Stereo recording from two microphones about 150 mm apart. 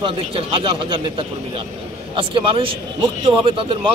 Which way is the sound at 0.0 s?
35° right (ahead or behind).